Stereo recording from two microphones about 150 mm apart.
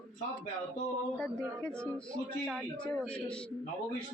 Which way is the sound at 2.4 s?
5° left (ahead or behind).